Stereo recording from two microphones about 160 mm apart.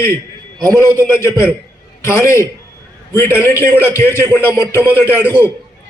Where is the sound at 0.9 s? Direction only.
15° left (ahead or behind).